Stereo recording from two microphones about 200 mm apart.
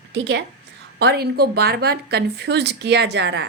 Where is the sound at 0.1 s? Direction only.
55° right (ahead or behind).